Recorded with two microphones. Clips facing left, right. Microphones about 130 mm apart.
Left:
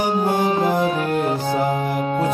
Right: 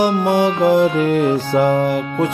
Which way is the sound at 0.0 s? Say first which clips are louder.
Right 4 dB; 85° right.